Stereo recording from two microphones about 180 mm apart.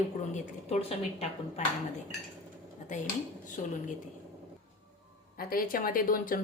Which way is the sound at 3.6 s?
45° left (ahead or behind).